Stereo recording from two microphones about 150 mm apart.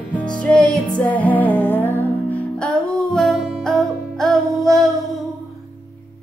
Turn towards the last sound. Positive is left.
turn(degrees=0)  # may be behind; listen again after turning